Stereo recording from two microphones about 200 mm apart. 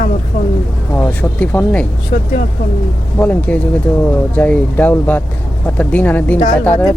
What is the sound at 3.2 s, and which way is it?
Speech, 10° left (ahead or behind).